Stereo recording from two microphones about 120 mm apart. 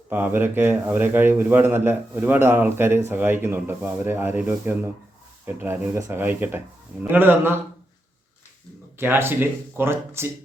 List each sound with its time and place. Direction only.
0.1 s a man's voice: 15° right (ahead or behind)
9.0 s speech: 20° right (ahead or behind)